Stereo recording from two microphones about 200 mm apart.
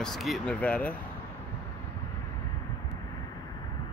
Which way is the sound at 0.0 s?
Centre (ahead or behind).